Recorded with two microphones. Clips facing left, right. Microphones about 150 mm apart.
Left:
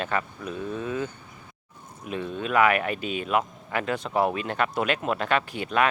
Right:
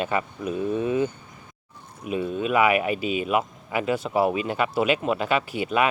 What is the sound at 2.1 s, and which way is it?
Speech, 10° right (ahead or behind).